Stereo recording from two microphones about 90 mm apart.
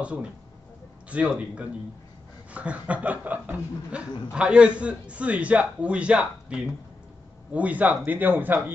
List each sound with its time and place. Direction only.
0.0 s a man's voice: 15° right (ahead or behind)